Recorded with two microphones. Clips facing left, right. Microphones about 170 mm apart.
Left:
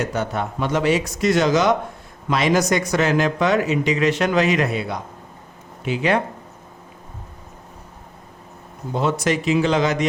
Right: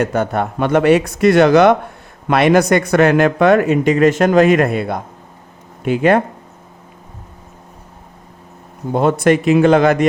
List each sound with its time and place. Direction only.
0.0 s speech: 55° right (ahead or behind)
8.9 s speech: 55° right (ahead or behind)